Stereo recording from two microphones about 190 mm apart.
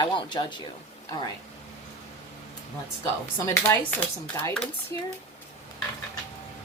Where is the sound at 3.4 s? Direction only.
15° left (ahead or behind).